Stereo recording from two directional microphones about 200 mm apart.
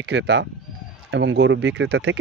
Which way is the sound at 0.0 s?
60° right (ahead or behind).